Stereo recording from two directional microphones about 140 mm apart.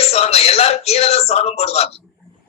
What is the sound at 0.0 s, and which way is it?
A man's voice, 50° left (ahead or behind).